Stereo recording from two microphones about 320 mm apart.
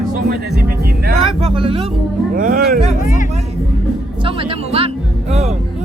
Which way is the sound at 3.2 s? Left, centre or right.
Centre.